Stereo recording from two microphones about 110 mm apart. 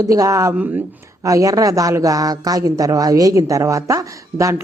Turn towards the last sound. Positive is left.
turn(degrees=-30)  # may be behind; listen again after turning